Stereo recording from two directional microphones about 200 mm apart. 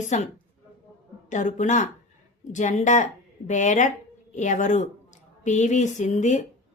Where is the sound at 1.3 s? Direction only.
40° left (ahead or behind).